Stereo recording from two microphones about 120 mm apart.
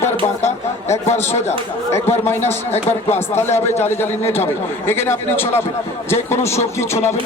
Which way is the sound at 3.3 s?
20° left (ahead or behind).